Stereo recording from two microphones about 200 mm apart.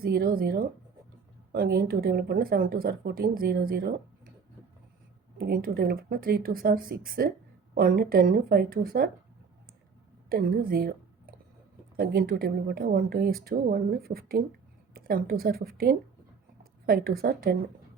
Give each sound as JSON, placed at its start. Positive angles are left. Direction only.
{"t": 0.0, "sound": "speech", "side_deg": -50}
{"t": 5.4, "sound": "speech", "side_deg": -45}
{"t": 10.2, "sound": "a woman's voice", "side_deg": -45}